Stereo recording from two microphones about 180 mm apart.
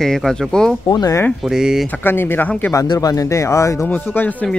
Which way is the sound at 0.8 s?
20° left (ahead or behind).